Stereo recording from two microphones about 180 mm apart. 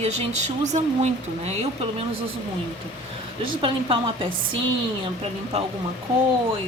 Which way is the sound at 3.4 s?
30° right (ahead or behind).